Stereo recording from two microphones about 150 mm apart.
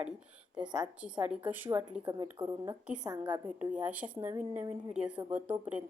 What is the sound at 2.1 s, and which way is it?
Speech, 25° right (ahead or behind).